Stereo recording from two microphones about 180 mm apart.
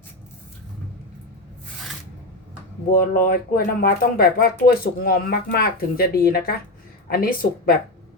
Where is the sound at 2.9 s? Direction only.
55° left (ahead or behind).